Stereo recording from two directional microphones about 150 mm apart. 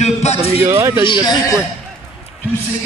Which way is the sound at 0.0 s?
45° left (ahead or behind).